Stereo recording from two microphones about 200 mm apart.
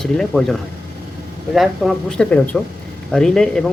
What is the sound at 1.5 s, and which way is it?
Speech, centre (ahead or behind).